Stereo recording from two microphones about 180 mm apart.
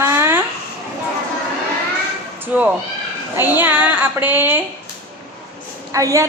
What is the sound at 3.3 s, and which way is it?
A woman's voice, 10° right (ahead or behind).